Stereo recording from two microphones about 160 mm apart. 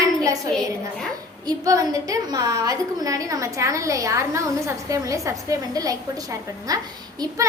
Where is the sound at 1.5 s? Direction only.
20° right (ahead or behind).